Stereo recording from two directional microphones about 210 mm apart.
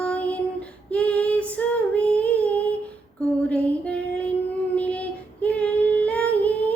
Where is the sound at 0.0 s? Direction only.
5° left (ahead or behind).